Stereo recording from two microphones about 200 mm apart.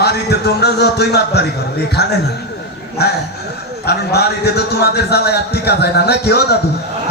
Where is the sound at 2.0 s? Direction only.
55° left (ahead or behind).